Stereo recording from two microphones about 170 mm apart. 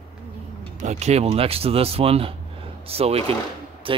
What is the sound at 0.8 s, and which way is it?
Speech, 45° right (ahead or behind).